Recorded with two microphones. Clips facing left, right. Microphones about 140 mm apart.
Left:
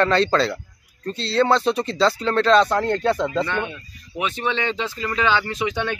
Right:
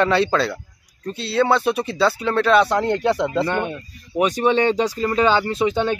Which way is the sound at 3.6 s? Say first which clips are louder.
Right 4 dB; 40° right (ahead or behind).